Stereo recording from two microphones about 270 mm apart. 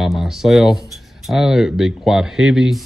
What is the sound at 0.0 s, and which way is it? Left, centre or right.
Speech, centre.